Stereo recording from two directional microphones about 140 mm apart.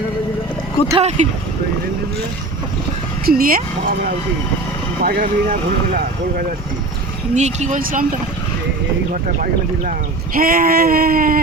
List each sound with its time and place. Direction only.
1.0 s speech: 55° right (ahead or behind)
3.2 s speech: 90° right
7.3 s speech: 55° right (ahead or behind)
7.8 s speech: 90° right
10.3 s speech: 90° right